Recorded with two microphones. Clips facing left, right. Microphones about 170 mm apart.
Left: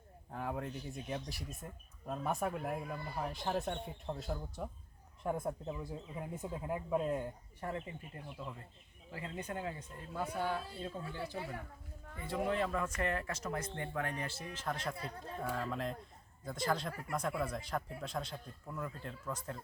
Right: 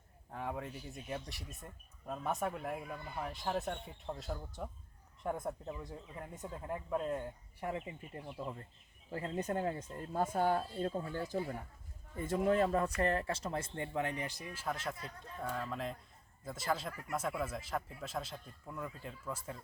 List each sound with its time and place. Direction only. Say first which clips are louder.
0.3 s speech: left 1 dB; centre (ahead or behind)
7.6 s a man's voice: right 1 dB; 15° right (ahead or behind)
8.1 s a man's voice: right 6 dB; 30° right (ahead or behind); by 14.8 s 10° right (ahead or behind)
14.9 s speech: left 4 dB; 35° left (ahead or behind)
15.4 s speech: left 1 dB; centre (ahead or behind)